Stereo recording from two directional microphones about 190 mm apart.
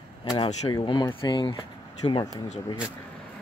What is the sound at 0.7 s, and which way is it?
Speech, 25° left (ahead or behind).